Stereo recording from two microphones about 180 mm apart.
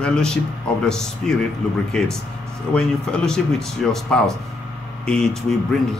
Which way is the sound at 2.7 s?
5° left (ahead or behind).